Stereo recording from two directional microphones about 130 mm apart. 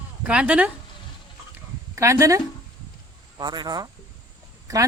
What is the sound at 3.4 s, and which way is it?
Speech, 30° right (ahead or behind).